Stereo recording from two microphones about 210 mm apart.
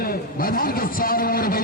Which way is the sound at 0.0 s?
45° left (ahead or behind).